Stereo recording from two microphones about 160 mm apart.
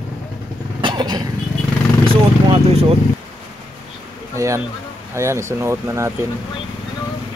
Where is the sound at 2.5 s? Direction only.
35° right (ahead or behind).